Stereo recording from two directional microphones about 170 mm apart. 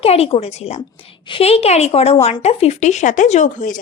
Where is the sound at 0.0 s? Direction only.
35° left (ahead or behind).